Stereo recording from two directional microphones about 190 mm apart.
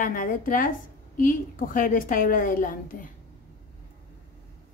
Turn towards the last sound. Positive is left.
turn(degrees=45)  # may be behind; listen again after turning